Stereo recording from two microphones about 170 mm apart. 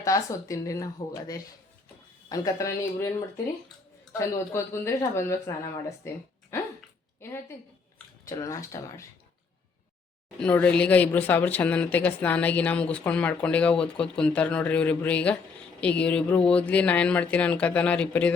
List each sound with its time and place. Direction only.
0.0 s speech: 20° left (ahead or behind)
6.5 s a sound: 15° left (ahead or behind)
7.2 s speech: 15° left (ahead or behind)
10.4 s speech: 10° left (ahead or behind)